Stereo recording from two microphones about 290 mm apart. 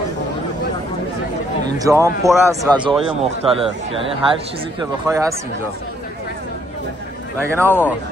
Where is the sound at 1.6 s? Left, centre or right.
Centre.